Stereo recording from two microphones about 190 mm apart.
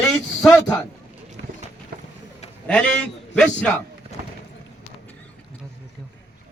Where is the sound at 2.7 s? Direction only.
5° left (ahead or behind).